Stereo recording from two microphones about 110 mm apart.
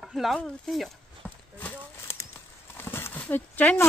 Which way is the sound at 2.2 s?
20° left (ahead or behind).